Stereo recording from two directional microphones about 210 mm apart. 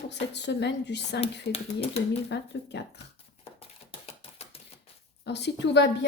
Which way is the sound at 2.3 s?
55° left (ahead or behind).